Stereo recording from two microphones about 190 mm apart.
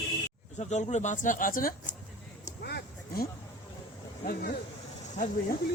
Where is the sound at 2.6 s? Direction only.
55° left (ahead or behind).